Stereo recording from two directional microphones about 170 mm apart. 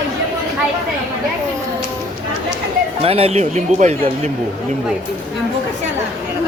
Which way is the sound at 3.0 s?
35° right (ahead or behind).